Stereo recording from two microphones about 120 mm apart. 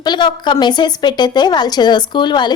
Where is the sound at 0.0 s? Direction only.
40° left (ahead or behind).